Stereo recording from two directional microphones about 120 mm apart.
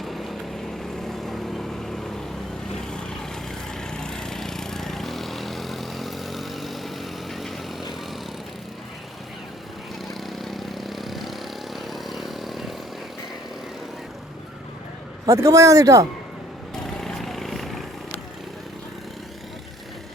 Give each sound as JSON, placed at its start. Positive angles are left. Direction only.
{"t": 0.0, "sound": "vehicle", "side_deg": 0}
{"t": 10.1, "sound": "vehicle", "side_deg": 0}
{"t": 15.3, "sound": "speech", "side_deg": -25}
{"t": 16.7, "sound": "vehicle", "side_deg": 5}